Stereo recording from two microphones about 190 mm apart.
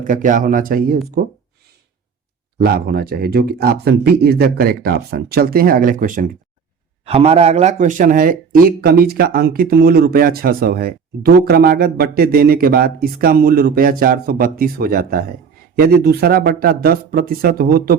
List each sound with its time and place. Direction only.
0.0 s speech: 45° right (ahead or behind)
2.6 s speech: 50° right (ahead or behind)
7.0 s speech: 35° right (ahead or behind); by 17.9 s 55° right (ahead or behind)